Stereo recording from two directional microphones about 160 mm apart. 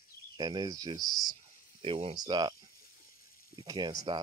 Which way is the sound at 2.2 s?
25° right (ahead or behind).